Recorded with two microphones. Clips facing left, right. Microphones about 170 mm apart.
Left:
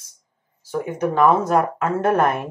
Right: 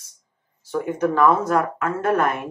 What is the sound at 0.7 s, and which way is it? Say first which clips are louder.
Speech: right 1 dB; 15° left (ahead or behind).